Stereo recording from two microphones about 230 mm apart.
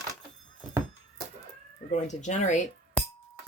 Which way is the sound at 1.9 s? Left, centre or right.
Left.